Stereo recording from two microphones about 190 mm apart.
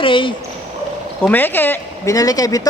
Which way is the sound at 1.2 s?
10° left (ahead or behind).